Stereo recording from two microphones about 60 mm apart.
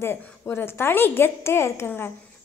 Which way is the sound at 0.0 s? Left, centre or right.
Left.